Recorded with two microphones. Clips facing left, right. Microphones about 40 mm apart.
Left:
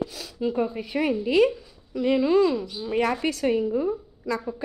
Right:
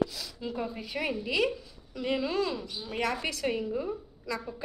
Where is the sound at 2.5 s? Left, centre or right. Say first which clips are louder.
Left 9 dB; left.